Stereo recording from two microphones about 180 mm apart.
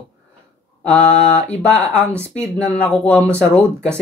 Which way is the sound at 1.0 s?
40° left (ahead or behind).